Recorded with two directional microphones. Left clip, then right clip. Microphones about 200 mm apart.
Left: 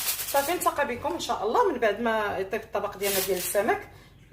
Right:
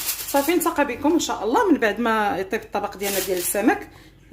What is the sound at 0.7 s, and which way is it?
Speech, 55° right (ahead or behind).